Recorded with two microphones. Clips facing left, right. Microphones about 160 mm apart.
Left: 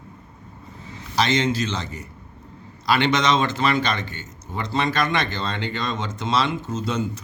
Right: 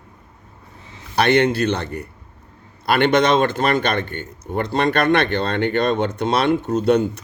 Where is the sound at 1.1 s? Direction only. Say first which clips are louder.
Right 5 dB; 60° right (ahead or behind).